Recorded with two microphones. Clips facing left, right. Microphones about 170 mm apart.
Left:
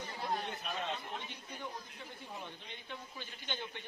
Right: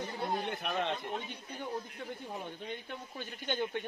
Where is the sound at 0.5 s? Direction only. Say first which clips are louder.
Right 6 dB; 65° right (ahead or behind).